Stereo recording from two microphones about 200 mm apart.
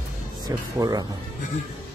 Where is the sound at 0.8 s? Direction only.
20° right (ahead or behind).